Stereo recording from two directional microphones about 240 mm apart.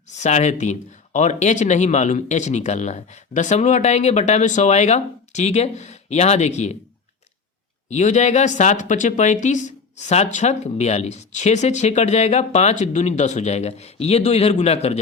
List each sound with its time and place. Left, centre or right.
0.1 s speech: left
7.9 s speech: left